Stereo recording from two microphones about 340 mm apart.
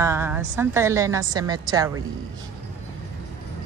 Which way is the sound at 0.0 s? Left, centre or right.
Centre.